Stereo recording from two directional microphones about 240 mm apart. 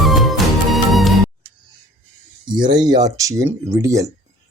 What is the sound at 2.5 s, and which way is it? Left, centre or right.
Speech, centre.